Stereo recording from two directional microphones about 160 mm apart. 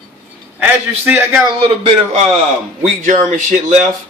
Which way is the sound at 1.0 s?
10° right (ahead or behind).